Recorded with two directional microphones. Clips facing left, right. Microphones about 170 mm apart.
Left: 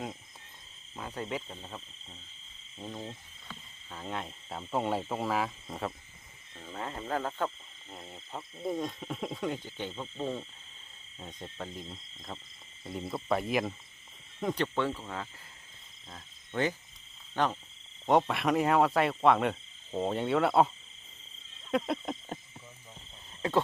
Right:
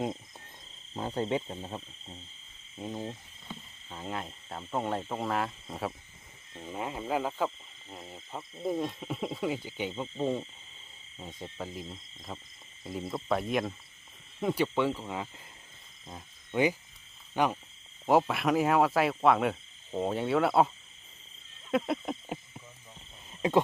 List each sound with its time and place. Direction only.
0.9 s speech: 30° right (ahead or behind)
2.7 s speech: 10° right (ahead or behind)
6.6 s speech: 15° right (ahead or behind)
16.0 s cricket: 15° right (ahead or behind)
17.3 s speech: 10° right (ahead or behind)
21.6 s a sound: centre (ahead or behind)
23.4 s wild animals: 15° right (ahead or behind)